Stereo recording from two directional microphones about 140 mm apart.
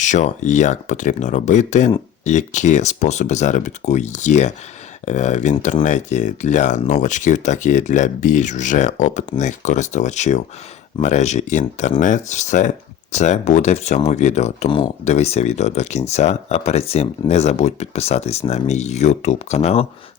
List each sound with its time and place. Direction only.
0.0 s speech: 60° left (ahead or behind)